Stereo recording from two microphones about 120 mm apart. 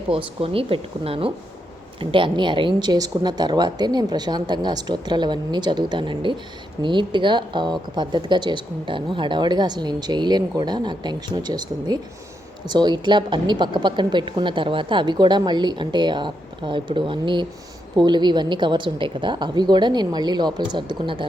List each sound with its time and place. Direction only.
0.1 s speech: 50° right (ahead or behind)